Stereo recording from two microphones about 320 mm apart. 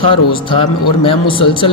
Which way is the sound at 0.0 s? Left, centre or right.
Centre.